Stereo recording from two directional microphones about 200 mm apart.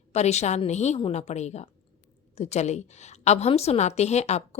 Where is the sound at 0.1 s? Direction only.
35° left (ahead or behind).